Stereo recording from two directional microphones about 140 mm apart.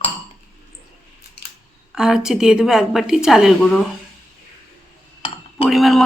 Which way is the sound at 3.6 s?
5° left (ahead or behind).